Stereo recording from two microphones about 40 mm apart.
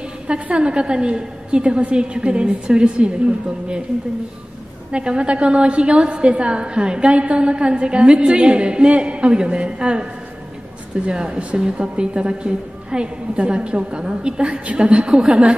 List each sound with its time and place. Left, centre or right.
0.3 s a woman's voice: right
4.9 s a woman's voice: right
11.1 s a woman's voice: right